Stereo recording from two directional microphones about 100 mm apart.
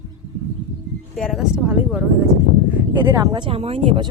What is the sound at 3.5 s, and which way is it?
Speech, 70° right (ahead or behind).